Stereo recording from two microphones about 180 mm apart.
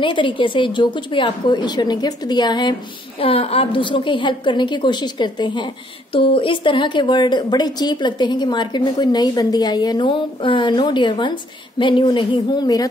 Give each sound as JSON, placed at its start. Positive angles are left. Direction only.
{"t": 0.0, "sound": "a woman's voice", "side_deg": 25}